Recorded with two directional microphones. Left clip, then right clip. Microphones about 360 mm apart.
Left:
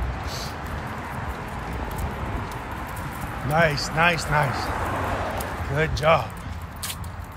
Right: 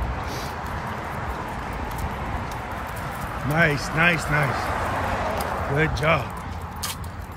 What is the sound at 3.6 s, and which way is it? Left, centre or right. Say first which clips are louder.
Speech: even; centre.